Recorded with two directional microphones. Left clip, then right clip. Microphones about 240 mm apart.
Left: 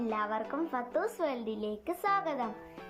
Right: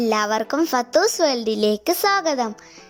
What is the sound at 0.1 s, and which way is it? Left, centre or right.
A child's voice, right.